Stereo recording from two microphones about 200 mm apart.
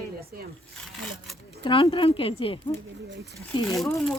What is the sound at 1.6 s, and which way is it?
Speech, 25° left (ahead or behind).